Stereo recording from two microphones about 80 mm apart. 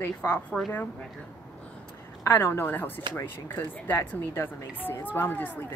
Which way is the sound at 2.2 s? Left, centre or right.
Left.